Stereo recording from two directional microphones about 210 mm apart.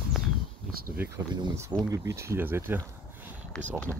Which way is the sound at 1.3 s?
20° right (ahead or behind).